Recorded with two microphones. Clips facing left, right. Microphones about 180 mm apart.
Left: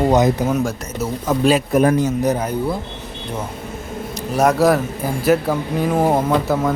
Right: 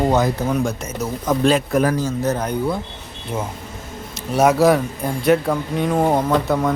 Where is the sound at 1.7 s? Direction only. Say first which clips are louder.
Left 3 dB; 20° left (ahead or behind).